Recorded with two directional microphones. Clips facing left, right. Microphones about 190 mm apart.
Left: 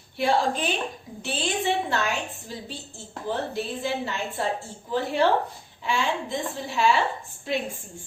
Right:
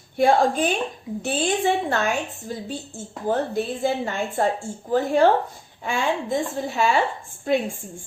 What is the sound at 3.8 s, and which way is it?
A woman's voice, 50° right (ahead or behind).